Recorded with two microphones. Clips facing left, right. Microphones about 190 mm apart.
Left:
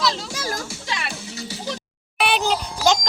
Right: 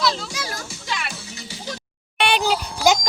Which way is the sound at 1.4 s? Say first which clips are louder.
Left 5 dB; 40° left (ahead or behind).